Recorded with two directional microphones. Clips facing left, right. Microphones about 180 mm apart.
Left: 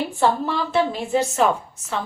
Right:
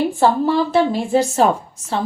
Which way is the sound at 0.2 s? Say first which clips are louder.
Right 4 dB; 35° right (ahead or behind).